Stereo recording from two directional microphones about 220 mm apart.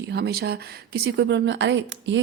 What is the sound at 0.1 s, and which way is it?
A woman's voice, 45° right (ahead or behind).